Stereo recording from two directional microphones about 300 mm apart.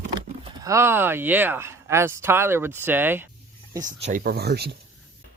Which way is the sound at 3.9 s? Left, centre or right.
Right.